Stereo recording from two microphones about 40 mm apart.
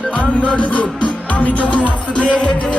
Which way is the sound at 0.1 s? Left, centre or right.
Left.